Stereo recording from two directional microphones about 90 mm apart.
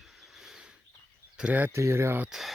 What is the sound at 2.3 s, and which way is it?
Speech, centre (ahead or behind).